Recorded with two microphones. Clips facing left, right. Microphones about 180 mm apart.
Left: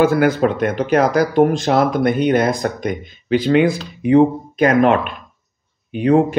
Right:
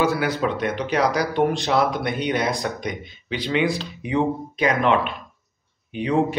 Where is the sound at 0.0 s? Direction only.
50° left (ahead or behind).